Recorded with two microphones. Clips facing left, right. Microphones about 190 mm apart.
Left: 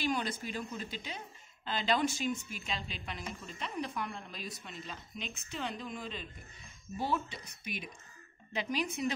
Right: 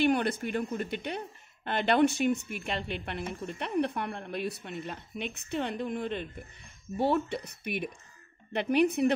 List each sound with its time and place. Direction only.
0.0 s speech: 60° right (ahead or behind)